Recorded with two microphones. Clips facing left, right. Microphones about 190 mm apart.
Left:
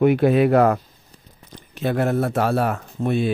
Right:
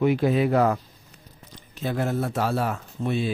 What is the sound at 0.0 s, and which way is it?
Speech, 60° left (ahead or behind).